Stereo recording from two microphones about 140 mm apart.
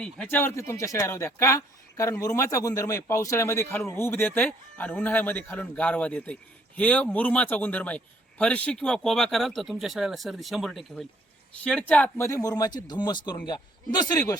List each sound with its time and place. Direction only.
0.0 s speech: 10° left (ahead or behind); by 14.3 s 30° left (ahead or behind)